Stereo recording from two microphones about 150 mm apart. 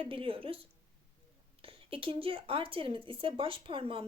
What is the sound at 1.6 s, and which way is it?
Speech, 35° right (ahead or behind).